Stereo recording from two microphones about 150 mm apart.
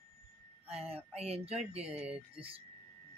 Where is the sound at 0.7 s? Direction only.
40° right (ahead or behind).